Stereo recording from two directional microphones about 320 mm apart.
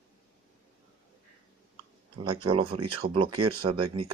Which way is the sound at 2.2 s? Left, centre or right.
Centre.